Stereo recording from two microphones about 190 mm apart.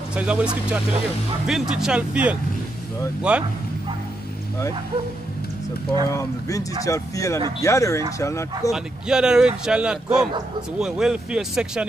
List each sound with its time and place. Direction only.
0.1 s speech: 5° right (ahead or behind)
6.0 s speech: 15° left (ahead or behind)
8.7 s speech: 5° right (ahead or behind)